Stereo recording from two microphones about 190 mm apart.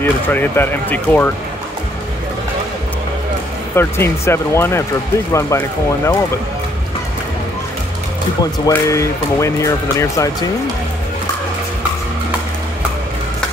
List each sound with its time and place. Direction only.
0.0 s speech: 10° left (ahead or behind)
3.7 s speech: 15° left (ahead or behind)
8.6 s speech: 15° left (ahead or behind)